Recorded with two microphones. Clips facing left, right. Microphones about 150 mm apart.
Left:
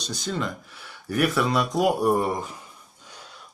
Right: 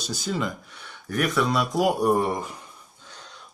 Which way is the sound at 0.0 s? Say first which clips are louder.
Right 1 dB; 5° right (ahead or behind).